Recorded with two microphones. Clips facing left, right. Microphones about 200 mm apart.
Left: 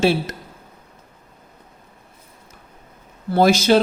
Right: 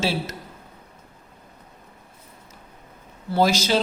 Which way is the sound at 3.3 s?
55° left (ahead or behind).